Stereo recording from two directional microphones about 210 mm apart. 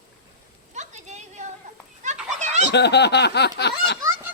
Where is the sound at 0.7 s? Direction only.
35° right (ahead or behind).